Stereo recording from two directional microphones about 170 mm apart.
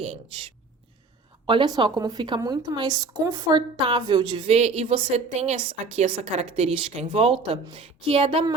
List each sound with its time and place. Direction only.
1.5 s a woman's voice: 25° right (ahead or behind)